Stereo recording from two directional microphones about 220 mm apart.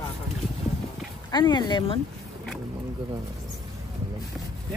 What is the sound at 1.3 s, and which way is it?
Speech, 20° left (ahead or behind).